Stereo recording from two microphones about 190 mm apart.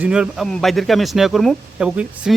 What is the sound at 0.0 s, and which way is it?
Speech, 5° right (ahead or behind).